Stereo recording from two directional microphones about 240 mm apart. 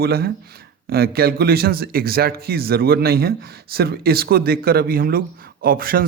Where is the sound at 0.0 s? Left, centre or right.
Right.